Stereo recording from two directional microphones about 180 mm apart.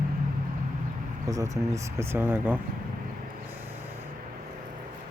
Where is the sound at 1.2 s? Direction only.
20° right (ahead or behind).